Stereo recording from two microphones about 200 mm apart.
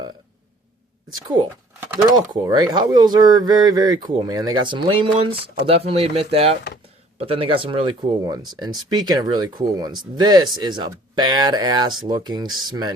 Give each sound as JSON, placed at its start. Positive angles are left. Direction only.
{"t": 1.1, "sound": "speech", "side_deg": -20}